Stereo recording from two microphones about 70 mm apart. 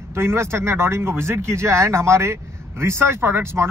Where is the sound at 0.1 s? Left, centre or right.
Right.